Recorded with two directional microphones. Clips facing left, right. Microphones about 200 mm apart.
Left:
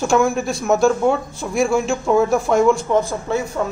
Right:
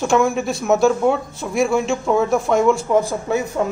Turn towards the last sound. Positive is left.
turn(degrees=-15)  # may be behind; listen again after turning